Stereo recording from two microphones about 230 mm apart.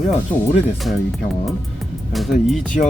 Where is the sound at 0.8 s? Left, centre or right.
Centre.